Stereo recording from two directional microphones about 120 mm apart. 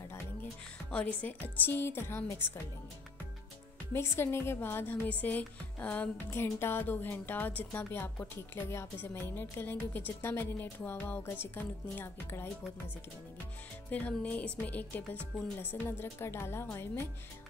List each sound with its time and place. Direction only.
0.8 s a woman's voice: 10° left (ahead or behind)
3.9 s a woman's voice: 20° left (ahead or behind)
13.8 s a woman's voice: 10° left (ahead or behind)